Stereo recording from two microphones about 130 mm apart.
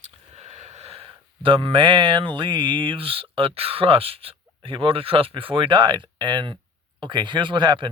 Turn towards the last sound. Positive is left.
turn(degrees=-35)  # may be behind; listen again after turning